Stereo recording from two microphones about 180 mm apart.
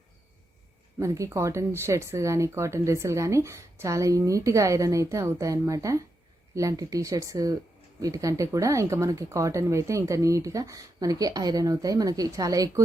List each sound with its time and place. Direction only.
0.9 s speech: 15° right (ahead or behind)